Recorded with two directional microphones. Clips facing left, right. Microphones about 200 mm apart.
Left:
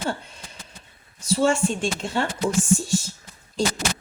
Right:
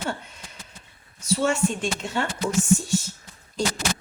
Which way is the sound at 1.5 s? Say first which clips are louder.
Left 2 dB; 30° left (ahead or behind).